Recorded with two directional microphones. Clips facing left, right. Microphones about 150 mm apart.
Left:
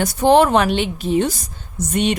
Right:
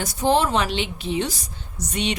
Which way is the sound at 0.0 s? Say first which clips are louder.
Left 7 dB; 60° left (ahead or behind).